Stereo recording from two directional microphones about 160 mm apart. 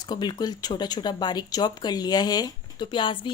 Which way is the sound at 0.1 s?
25° left (ahead or behind).